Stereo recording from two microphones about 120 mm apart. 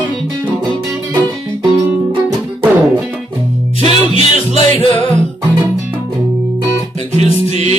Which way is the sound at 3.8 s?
45° left (ahead or behind).